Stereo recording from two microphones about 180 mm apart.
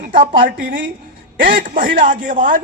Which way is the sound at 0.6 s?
50° right (ahead or behind).